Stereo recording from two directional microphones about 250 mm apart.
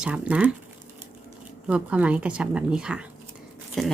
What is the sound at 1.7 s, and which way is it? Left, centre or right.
Speech, centre.